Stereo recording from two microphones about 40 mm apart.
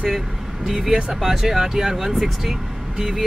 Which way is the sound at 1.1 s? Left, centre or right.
Centre.